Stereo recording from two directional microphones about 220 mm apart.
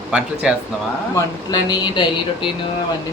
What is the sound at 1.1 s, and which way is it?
Speech, 15° left (ahead or behind).